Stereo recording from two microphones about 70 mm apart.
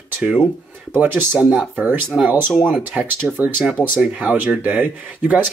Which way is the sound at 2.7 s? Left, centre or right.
Centre.